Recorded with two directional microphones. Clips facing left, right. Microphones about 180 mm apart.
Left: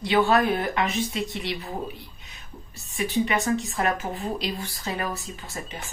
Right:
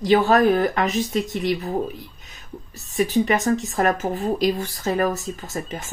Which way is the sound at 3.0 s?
40° right (ahead or behind).